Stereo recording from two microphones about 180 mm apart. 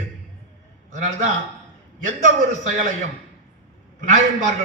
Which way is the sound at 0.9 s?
45° right (ahead or behind).